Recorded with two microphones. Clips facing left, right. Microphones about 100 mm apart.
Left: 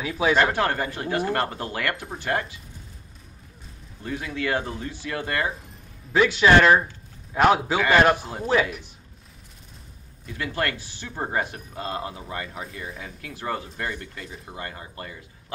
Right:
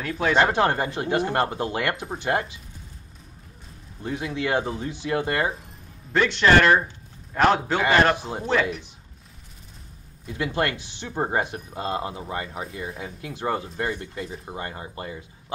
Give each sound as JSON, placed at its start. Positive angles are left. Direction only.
{"t": 0.0, "sound": "speech", "side_deg": 5}
{"t": 0.4, "sound": "speech", "side_deg": -20}
{"t": 4.0, "sound": "speech", "side_deg": -20}
{"t": 6.1, "sound": "speech", "side_deg": 5}
{"t": 10.2, "sound": "speech", "side_deg": -20}